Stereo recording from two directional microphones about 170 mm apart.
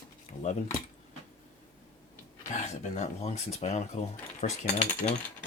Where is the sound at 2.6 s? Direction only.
40° left (ahead or behind).